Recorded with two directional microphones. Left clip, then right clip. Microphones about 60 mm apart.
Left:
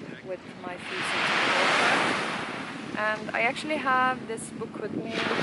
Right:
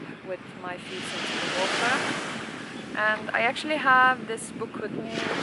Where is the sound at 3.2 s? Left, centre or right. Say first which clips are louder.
Right 2 dB; centre.